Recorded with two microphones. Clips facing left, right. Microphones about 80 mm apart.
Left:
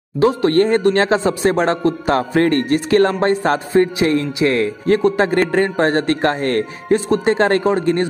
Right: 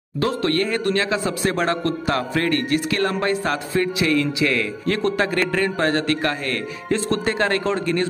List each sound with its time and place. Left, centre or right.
0.2 s a man's voice: left
2.0 s music: left
5.1 s a man's voice: left
5.5 s music: left
6.9 s a man's voice: left